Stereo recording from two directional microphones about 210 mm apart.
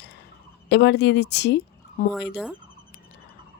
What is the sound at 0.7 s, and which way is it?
Speech, 55° left (ahead or behind).